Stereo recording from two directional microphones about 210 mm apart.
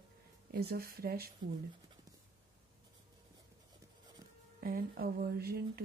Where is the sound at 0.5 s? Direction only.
50° right (ahead or behind).